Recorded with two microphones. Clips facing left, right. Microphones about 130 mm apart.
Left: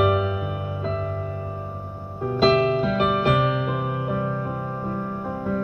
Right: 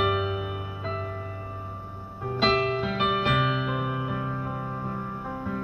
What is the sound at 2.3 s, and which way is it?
Music, 40° left (ahead or behind).